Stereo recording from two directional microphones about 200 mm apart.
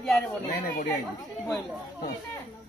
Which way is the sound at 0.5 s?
50° left (ahead or behind).